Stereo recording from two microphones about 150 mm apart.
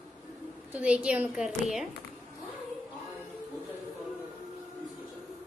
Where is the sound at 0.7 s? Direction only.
10° right (ahead or behind).